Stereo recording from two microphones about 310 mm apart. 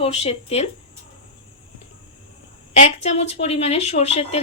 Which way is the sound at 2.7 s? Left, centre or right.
Left.